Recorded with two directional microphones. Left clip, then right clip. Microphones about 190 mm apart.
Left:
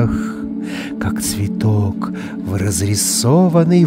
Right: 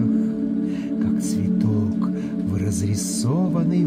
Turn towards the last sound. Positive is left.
turn(degrees=50)  # may be behind; listen again after turning